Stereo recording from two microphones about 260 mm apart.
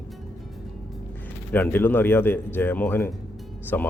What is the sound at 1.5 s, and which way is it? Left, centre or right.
Speech, centre.